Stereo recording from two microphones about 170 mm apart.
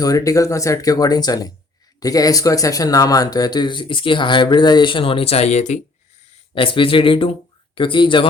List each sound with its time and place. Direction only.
0.0 s speech: 20° left (ahead or behind); by 5.8 s 40° left (ahead or behind)
6.5 s speech: 30° left (ahead or behind)